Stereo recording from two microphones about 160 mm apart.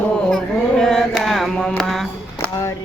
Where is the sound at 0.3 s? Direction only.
5° left (ahead or behind).